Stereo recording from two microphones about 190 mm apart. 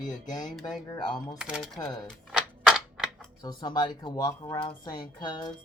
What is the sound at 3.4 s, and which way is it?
Speech, 20° left (ahead or behind).